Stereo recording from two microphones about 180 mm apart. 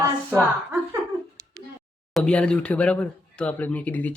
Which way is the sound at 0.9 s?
15° right (ahead or behind).